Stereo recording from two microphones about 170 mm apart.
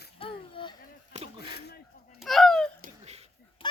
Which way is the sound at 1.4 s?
70° left (ahead or behind).